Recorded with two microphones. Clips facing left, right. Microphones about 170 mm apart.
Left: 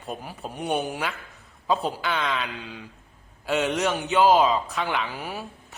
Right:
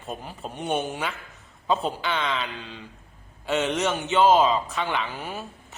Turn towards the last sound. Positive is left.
turn(degrees=10)  # may be behind; listen again after turning